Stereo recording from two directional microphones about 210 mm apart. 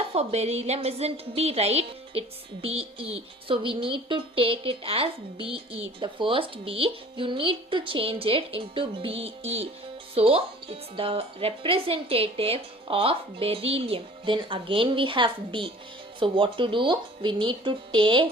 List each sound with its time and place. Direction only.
0.1 s a woman's voice: 30° right (ahead or behind)